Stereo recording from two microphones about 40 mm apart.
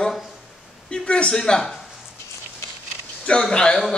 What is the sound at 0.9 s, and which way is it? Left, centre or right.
Speech, left.